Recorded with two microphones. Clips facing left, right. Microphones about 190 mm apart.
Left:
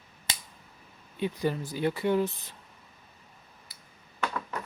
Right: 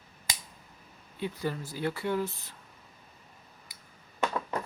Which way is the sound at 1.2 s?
20° left (ahead or behind).